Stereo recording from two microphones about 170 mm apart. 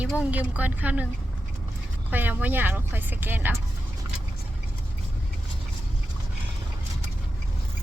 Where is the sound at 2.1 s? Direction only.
10° right (ahead or behind).